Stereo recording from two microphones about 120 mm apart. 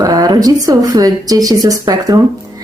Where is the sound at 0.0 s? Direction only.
35° right (ahead or behind).